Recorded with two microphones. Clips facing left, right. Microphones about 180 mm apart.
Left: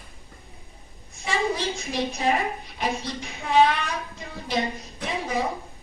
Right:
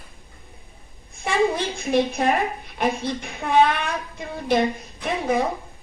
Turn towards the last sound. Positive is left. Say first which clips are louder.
# right 5 dB
turn(degrees=-55)  # may be behind; listen again after turning